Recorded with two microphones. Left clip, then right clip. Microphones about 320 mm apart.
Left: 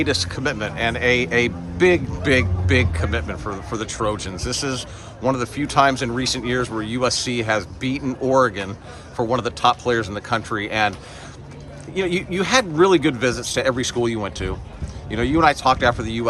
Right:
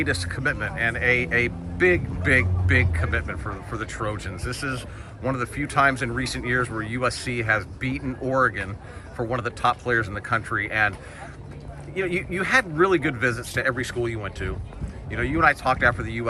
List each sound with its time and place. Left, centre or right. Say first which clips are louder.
0.0 s a man's voice: left 4 dB; centre
11.9 s a man's voice: left 4 dB; centre